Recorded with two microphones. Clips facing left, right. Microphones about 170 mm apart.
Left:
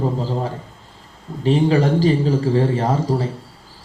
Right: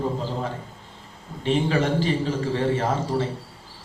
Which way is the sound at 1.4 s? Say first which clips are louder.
Left 6 dB; 35° left (ahead or behind).